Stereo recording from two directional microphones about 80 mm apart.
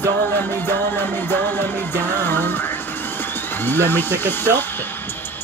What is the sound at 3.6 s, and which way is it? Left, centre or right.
Music, left.